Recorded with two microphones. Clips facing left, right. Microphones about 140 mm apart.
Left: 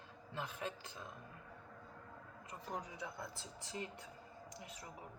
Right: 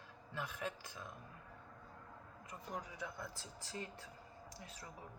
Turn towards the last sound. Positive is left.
turn(degrees=20)  # may be behind; listen again after turning